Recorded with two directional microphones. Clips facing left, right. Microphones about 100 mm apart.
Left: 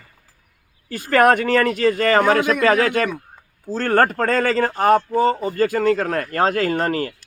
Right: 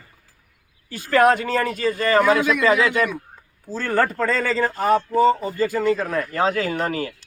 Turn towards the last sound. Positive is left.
turn(degrees=50)  # may be behind; listen again after turning